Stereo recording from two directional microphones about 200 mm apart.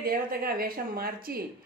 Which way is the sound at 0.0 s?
50° right (ahead or behind).